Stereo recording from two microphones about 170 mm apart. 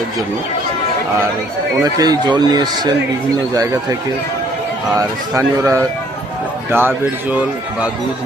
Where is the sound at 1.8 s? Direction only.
20° right (ahead or behind).